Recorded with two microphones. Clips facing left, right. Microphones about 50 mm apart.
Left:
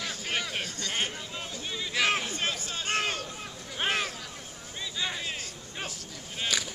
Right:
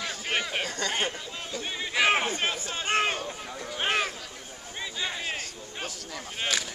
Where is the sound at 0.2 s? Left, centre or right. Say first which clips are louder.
Right 4 dB; centre.